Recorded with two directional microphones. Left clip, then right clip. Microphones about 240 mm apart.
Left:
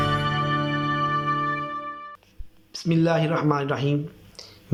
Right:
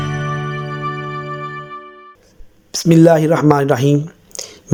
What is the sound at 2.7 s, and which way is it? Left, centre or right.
Speech, right.